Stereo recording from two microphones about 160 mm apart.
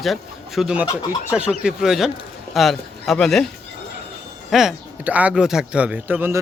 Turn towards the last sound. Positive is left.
turn(degrees=-10)  # may be behind; listen again after turning